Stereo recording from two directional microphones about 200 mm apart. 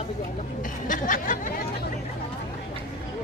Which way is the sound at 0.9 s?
40° left (ahead or behind).